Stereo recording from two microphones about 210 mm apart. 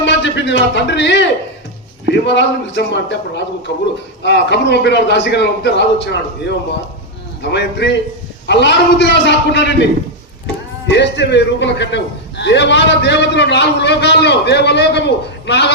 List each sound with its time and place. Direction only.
0.0 s a man's voice: 60° left (ahead or behind)
10.8 s a man's voice: 55° left (ahead or behind)